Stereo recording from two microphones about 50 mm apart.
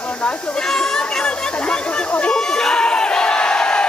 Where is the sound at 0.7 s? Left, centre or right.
Centre.